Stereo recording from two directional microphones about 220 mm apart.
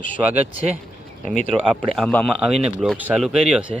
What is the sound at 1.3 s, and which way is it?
Speech, 5° left (ahead or behind).